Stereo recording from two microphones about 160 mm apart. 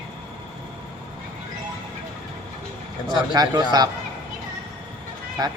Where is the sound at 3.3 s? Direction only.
25° right (ahead or behind).